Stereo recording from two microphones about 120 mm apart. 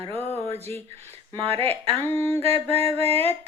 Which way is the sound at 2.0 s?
20° left (ahead or behind).